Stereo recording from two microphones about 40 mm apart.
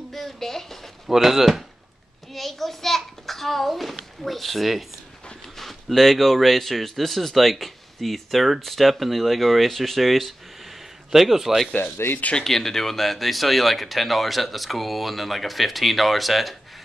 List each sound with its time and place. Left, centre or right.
0.1 s speech: centre
1.0 s a child's voice: centre
11.8 s speech: left
12.4 s speech: centre